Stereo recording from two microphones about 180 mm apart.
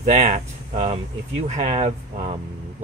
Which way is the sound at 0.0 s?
40° right (ahead or behind).